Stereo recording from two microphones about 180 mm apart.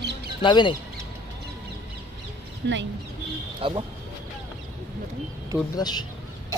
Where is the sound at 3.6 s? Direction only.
25° right (ahead or behind).